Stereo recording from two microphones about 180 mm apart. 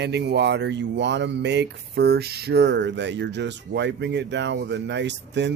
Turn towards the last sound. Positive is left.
turn(degrees=-75)  # may be behind; listen again after turning